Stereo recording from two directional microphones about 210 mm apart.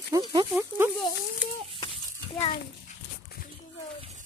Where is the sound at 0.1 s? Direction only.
20° right (ahead or behind).